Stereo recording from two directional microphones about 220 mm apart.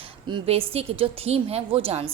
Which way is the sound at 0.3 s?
25° right (ahead or behind).